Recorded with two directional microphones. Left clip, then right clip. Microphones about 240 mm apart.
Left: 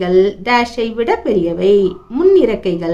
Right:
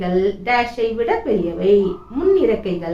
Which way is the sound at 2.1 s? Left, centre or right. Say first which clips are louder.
Left 5 dB; left.